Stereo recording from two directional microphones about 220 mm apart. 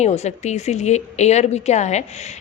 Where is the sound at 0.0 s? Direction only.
30° left (ahead or behind).